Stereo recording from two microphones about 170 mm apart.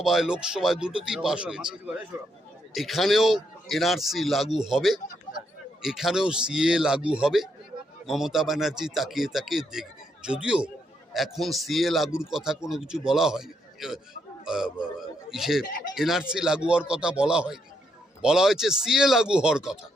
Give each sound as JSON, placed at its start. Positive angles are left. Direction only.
{"t": 0.0, "sound": "a man's voice", "side_deg": 0}